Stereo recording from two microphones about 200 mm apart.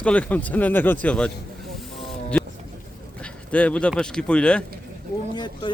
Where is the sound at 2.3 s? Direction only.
5° left (ahead or behind).